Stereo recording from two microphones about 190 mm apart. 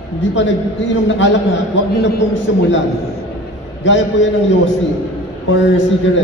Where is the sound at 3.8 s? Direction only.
75° left (ahead or behind).